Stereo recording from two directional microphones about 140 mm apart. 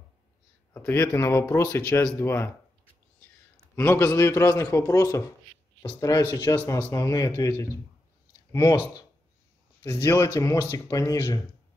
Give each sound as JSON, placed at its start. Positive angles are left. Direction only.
{"t": 0.7, "sound": "speech", "side_deg": 20}
{"t": 3.7, "sound": "speech", "side_deg": 20}